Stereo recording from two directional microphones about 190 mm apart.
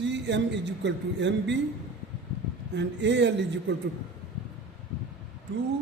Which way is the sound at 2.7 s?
65° right (ahead or behind).